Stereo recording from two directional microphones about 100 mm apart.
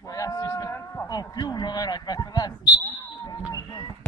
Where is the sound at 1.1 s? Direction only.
40° left (ahead or behind).